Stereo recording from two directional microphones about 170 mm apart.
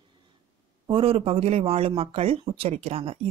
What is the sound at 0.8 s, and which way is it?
Speech, 30° right (ahead or behind).